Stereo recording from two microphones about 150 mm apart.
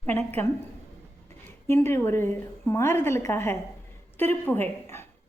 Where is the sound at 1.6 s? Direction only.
15° left (ahead or behind).